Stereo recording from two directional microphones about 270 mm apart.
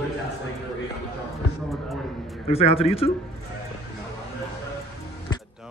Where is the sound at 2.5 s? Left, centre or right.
Left.